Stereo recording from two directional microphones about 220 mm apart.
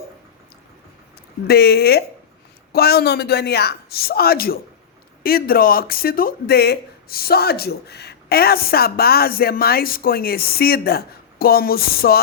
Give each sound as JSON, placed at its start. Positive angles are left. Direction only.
{"t": 1.5, "sound": "speech", "side_deg": 45}